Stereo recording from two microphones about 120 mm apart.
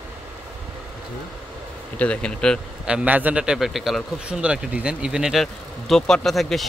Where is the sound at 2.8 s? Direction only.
10° right (ahead or behind).